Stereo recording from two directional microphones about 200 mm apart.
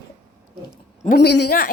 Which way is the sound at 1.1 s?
60° left (ahead or behind).